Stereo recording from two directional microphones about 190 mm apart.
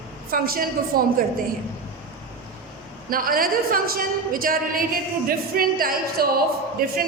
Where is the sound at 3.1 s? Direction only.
50° right (ahead or behind).